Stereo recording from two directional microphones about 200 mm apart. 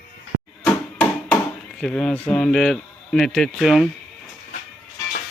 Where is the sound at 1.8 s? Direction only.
5° left (ahead or behind).